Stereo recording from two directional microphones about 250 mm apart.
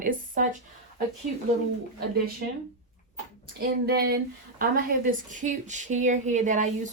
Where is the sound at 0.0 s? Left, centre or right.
Right.